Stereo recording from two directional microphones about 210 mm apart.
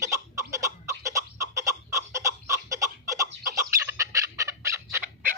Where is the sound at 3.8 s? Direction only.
15° right (ahead or behind).